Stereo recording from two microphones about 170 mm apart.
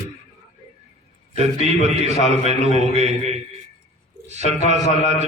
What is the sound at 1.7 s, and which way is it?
A man's voice, 40° right (ahead or behind).